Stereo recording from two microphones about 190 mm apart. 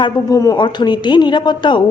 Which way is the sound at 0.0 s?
20° left (ahead or behind).